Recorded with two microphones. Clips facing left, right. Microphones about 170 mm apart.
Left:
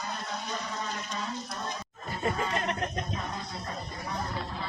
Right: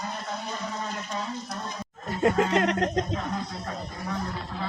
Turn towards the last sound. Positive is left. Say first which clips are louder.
# right 8 dB
turn(degrees=-90)